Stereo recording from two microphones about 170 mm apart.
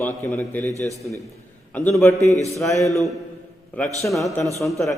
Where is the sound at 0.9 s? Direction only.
20° right (ahead or behind).